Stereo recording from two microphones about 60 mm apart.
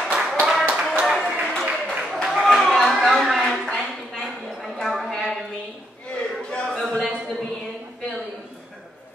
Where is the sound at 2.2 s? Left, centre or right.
Centre.